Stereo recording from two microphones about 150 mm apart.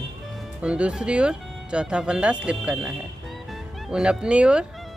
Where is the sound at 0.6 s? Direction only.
5° right (ahead or behind).